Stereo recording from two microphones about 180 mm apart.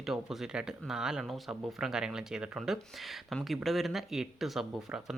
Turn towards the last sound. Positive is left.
turn(degrees=0)  # may be behind; listen again after turning